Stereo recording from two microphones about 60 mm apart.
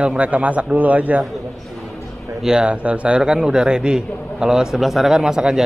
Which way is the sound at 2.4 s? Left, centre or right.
Centre.